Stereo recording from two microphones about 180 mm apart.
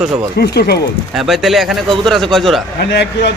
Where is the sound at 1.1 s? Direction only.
Centre (ahead or behind).